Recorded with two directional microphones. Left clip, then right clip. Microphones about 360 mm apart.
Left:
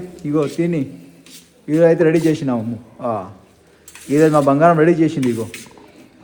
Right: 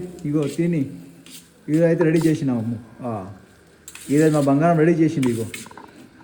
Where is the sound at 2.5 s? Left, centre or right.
Left.